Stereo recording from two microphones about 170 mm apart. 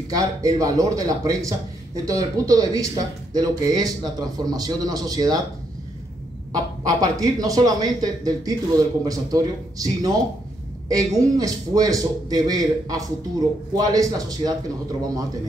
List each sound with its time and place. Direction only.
0.1 s speech: 20° right (ahead or behind)
6.5 s speech: 25° right (ahead or behind)